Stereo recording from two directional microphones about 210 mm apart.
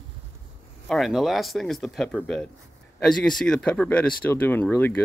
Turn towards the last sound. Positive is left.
turn(degrees=10)  # may be behind; listen again after turning